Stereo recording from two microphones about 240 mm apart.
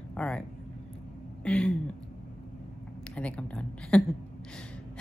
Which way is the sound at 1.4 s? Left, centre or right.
Centre.